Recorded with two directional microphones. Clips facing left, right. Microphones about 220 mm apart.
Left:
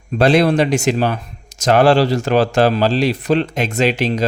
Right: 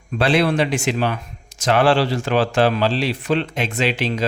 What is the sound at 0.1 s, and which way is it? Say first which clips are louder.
A man's voice: left 5 dB; 40° left (ahead or behind).